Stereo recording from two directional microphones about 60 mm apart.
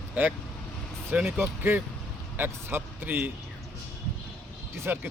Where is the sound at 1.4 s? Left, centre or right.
Right.